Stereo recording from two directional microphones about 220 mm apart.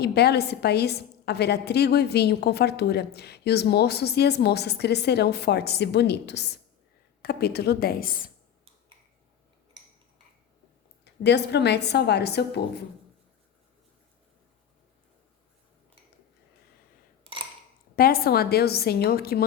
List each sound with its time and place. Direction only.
0.0 s a woman's voice: 45° left (ahead or behind)
11.0 s a woman's voice: 50° left (ahead or behind)
17.9 s a woman's voice: 40° left (ahead or behind)